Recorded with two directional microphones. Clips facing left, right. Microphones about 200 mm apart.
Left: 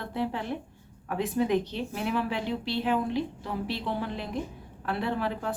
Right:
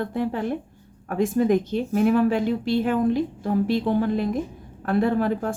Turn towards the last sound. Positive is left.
turn(degrees=-45)  # may be behind; listen again after turning